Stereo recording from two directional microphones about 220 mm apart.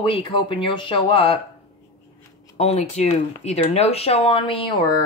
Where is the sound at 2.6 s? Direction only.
30° left (ahead or behind).